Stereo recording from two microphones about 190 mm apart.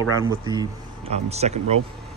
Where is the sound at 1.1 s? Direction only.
35° right (ahead or behind).